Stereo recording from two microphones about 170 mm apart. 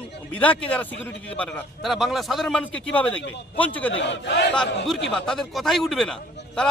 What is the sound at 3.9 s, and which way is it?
Speech, 90° left.